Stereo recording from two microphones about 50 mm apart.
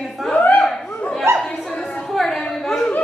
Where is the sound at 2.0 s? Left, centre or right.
Centre.